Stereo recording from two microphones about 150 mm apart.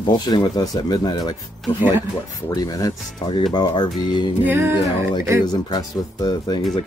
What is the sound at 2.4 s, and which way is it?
Speech, 25° left (ahead or behind).